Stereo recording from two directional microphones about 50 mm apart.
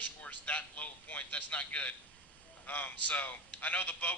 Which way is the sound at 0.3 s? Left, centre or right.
Left.